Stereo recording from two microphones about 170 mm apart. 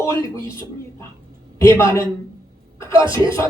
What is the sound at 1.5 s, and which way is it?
Speech, 15° left (ahead or behind).